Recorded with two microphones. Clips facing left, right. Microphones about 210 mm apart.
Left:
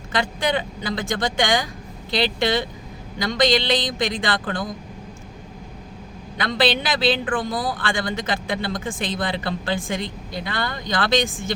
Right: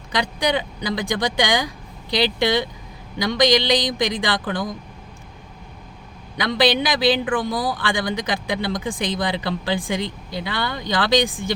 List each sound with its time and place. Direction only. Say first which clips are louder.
0.1 s speech: right 1 dB; 15° right (ahead or behind)
6.3 s speech: right 2 dB; 15° right (ahead or behind)